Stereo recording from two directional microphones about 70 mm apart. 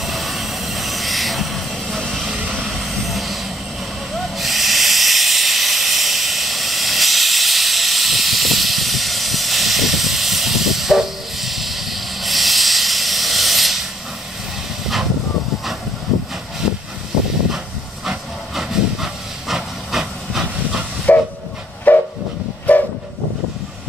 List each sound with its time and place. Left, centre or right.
0.0 s vehicle: centre
2.2 s vehicle: centre
2.6 s vehicle: centre
4.1 s hiss: centre
16.6 s vehicle: centre
18.0 s steam: centre
21.1 s train: left